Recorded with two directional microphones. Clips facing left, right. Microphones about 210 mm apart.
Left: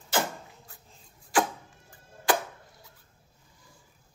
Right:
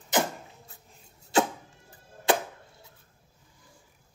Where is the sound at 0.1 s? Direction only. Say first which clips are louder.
Right 2 dB; 20° right (ahead or behind).